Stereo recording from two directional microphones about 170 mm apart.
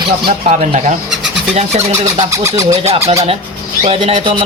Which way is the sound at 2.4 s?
20° right (ahead or behind).